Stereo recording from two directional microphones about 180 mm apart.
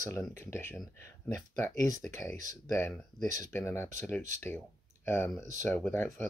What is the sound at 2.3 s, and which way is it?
Speech, 15° left (ahead or behind).